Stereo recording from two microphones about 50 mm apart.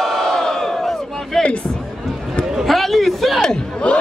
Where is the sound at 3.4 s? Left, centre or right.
Centre.